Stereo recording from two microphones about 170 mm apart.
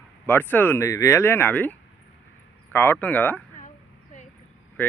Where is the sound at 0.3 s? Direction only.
10° left (ahead or behind).